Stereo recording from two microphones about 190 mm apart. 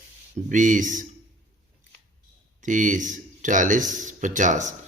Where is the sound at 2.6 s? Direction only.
40° right (ahead or behind).